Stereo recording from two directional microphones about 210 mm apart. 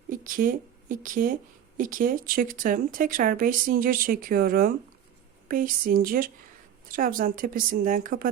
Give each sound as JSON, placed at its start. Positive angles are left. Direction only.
{"t": 0.1, "sound": "a woman's voice", "side_deg": -40}